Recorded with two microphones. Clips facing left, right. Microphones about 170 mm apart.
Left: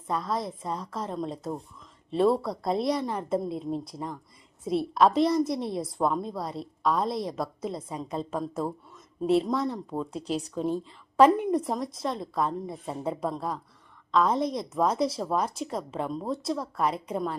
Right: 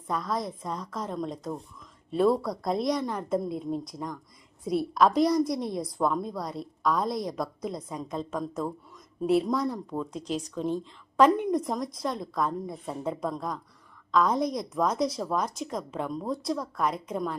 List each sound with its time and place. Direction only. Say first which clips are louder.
0.1 s a woman's voice: left 1 dB; centre (ahead or behind)
10.2 s speech: left 1 dB; 35° left (ahead or behind)
10.5 s a woman's voice: left 1 dB; 5° left (ahead or behind)